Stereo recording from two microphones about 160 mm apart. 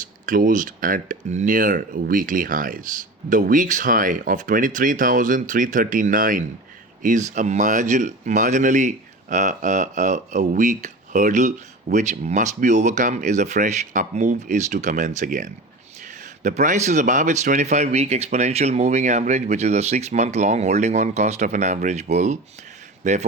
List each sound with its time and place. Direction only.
0.3 s speech: 60° right (ahead or behind)